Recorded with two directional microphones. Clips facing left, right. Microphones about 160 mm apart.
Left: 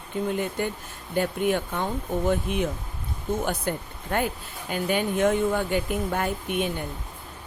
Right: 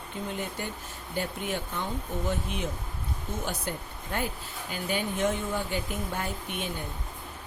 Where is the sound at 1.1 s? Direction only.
55° left (ahead or behind).